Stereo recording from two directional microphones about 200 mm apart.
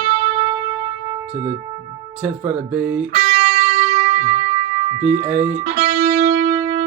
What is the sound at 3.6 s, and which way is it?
Music, 30° right (ahead or behind).